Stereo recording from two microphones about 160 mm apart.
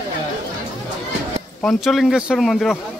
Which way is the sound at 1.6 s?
Centre (ahead or behind).